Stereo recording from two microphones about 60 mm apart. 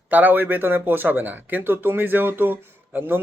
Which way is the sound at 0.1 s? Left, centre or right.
Right.